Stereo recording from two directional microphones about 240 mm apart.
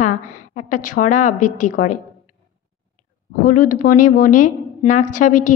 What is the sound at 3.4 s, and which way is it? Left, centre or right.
A woman's voice, left.